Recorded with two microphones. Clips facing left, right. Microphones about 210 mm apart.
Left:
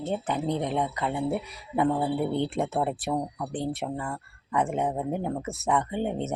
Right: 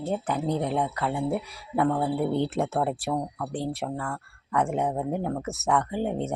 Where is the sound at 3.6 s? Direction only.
Centre (ahead or behind).